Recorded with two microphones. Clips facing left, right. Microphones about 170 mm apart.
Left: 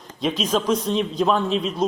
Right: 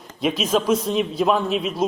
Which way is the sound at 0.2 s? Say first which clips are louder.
Right 2 dB; 10° right (ahead or behind).